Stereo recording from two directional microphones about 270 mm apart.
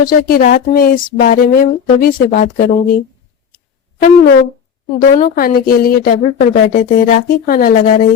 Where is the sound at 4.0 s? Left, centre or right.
Left.